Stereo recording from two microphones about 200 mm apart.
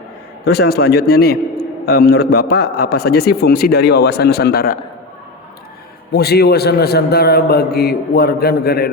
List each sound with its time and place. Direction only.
0.4 s a man's voice: 55° left (ahead or behind)
6.1 s a man's voice: 55° left (ahead or behind)